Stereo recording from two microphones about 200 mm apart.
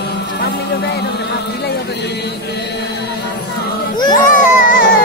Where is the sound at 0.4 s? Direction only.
60° left (ahead or behind).